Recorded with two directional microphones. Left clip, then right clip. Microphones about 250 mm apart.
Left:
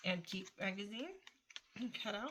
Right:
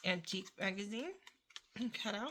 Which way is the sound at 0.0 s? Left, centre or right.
Right.